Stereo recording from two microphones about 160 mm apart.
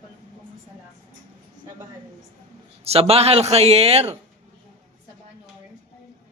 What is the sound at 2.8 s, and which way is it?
Speech, 40° right (ahead or behind).